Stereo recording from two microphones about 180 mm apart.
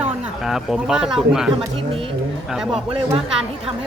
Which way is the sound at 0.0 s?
Centre (ahead or behind).